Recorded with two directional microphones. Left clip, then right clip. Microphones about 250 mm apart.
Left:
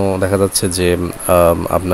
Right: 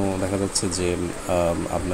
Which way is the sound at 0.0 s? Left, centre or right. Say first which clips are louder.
Left 10 dB; left.